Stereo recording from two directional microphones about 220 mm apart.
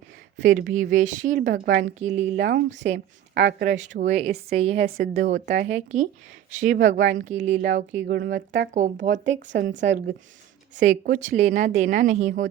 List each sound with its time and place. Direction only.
0.3 s a woman's voice: 35° right (ahead or behind)
2.1 s speech: 45° right (ahead or behind)
3.7 s a woman's voice: 35° right (ahead or behind)
7.5 s speech: 45° right (ahead or behind)
8.7 s a woman's voice: 35° right (ahead or behind)
9.6 s speech: 50° right (ahead or behind)
10.8 s a woman's voice: 35° right (ahead or behind)